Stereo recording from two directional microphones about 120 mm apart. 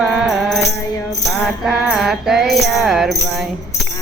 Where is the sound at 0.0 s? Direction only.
Centre (ahead or behind).